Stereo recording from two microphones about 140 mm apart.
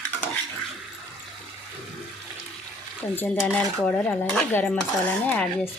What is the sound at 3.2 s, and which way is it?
Dishes, 10° left (ahead or behind).